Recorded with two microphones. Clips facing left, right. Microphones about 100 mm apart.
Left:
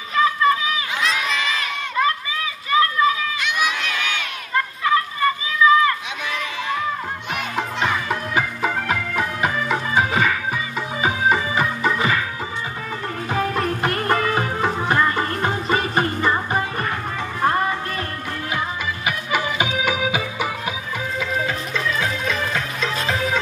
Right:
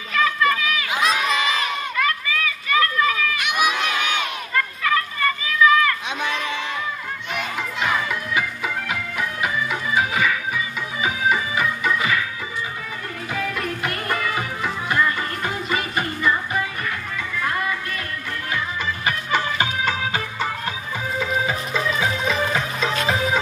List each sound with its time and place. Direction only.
0.1 s run: 25° left (ahead or behind)
1.0 s crowd: 15° right (ahead or behind)
2.0 s children playing: 25° left (ahead or behind)
3.3 s crowd: 15° right (ahead or behind)
4.6 s a sound: 20° left (ahead or behind)
7.5 s music: 40° left (ahead or behind)
13.3 s music: 35° left (ahead or behind)
19.0 s music: 10° left (ahead or behind)
21.2 s music: 5° right (ahead or behind)